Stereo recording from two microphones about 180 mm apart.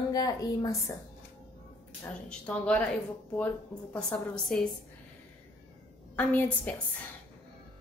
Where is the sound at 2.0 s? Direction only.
5° left (ahead or behind).